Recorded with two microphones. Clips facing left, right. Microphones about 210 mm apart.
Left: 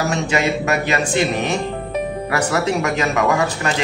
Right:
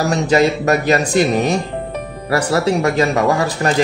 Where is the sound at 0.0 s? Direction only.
35° right (ahead or behind).